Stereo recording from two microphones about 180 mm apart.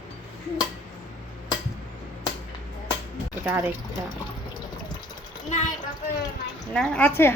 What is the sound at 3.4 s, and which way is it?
Speech, 15° right (ahead or behind).